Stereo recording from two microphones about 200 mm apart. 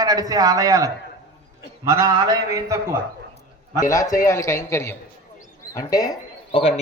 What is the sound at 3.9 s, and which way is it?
A man's voice, 15° left (ahead or behind).